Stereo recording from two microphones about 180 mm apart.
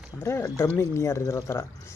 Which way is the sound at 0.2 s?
15° left (ahead or behind).